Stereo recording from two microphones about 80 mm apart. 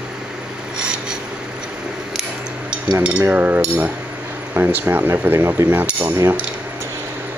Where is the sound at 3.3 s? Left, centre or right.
Right.